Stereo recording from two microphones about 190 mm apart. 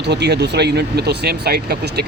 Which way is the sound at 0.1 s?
60° right (ahead or behind).